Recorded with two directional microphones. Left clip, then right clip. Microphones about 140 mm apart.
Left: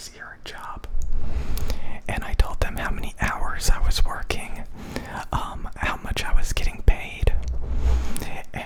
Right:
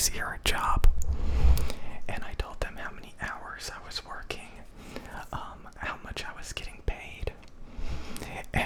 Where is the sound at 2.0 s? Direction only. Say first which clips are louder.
Left 8 dB; 25° left (ahead or behind).